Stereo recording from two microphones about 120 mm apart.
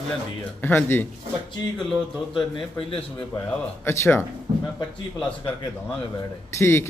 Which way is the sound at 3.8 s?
20° left (ahead or behind).